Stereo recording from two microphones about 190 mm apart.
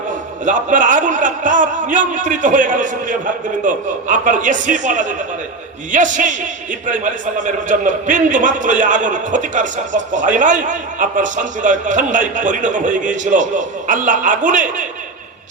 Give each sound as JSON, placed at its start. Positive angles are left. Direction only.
{"t": 0.4, "sound": "a man's voice", "side_deg": -45}